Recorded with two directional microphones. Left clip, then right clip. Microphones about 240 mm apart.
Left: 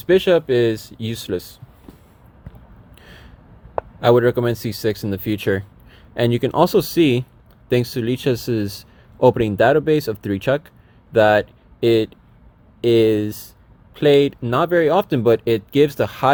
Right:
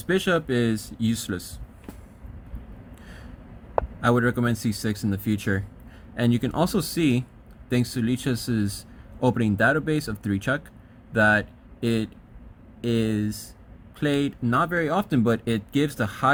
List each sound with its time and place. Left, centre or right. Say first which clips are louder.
0.0 s speech: left 8 dB; centre
3.0 s a sound: left 5 dB; centre
4.0 s speech: left 10 dB; left